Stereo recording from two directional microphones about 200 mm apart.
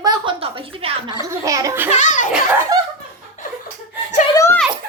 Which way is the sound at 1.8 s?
35° left (ahead or behind).